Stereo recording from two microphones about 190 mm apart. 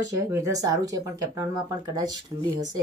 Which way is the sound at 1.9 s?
20° right (ahead or behind).